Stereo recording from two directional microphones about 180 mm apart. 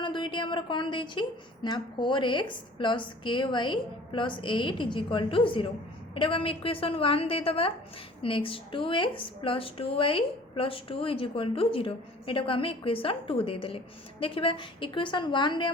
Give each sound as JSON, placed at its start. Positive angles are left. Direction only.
{"t": 0.0, "sound": "a woman's voice", "side_deg": 25}